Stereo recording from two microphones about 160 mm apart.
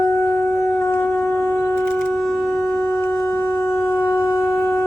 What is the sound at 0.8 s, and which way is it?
Shofar, 15° left (ahead or behind).